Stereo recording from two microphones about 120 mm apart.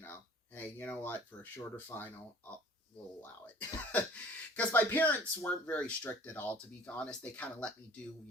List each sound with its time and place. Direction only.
0.0 s speech: 20° left (ahead or behind)
3.9 s speech: 15° left (ahead or behind)